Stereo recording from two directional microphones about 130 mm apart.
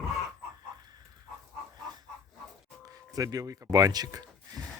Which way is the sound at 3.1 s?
30° right (ahead or behind).